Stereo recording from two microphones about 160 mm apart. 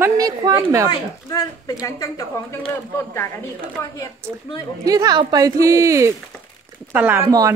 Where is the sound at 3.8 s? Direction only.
15° left (ahead or behind).